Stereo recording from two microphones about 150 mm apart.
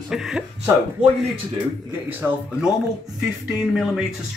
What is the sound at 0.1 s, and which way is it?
Speech, centre (ahead or behind).